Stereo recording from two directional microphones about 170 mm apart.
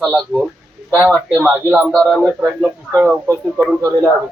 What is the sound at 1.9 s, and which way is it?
A man's voice, 5° left (ahead or behind).